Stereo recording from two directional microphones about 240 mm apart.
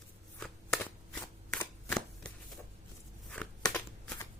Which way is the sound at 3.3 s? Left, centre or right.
Centre.